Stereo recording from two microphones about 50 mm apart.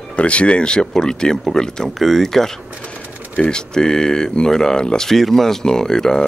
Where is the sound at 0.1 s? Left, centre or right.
Left.